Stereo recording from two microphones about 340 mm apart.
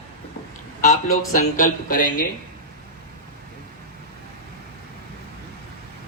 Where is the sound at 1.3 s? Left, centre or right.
Left.